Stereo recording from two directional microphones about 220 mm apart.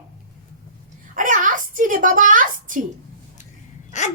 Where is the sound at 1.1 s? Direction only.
35° right (ahead or behind).